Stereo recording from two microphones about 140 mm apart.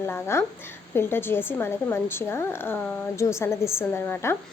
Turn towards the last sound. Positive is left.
turn(degrees=15)  # may be behind; listen again after turning